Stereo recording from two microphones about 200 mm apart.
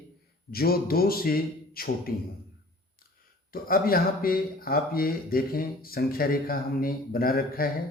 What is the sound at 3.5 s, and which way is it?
Speech, 45° left (ahead or behind).